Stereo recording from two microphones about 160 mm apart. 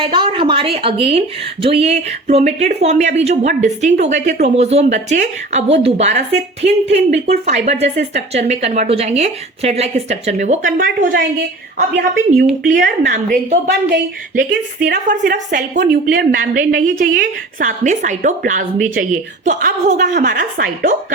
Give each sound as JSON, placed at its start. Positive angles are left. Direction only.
{"t": 0.0, "sound": "a woman's voice", "side_deg": -30}